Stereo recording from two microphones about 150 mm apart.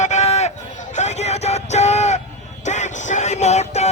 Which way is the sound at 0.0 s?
50° left (ahead or behind).